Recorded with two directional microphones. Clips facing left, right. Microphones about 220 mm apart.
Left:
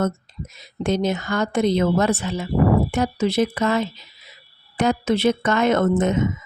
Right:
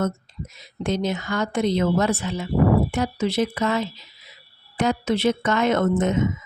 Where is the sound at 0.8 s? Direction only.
45° left (ahead or behind).